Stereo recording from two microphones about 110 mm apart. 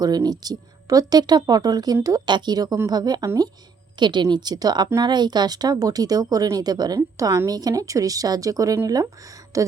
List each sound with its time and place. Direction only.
0.0 s speech: 35° right (ahead or behind)